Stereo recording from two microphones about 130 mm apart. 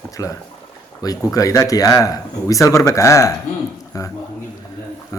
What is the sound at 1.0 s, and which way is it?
Speech, 30° left (ahead or behind).